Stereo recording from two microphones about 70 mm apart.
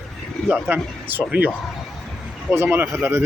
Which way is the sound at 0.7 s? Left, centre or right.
Right.